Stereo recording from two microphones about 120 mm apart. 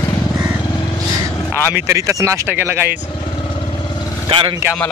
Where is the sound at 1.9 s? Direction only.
25° right (ahead or behind).